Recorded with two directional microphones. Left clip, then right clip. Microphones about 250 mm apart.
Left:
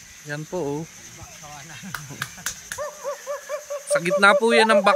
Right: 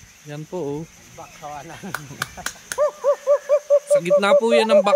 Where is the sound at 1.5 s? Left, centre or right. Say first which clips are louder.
Right 3 dB; right.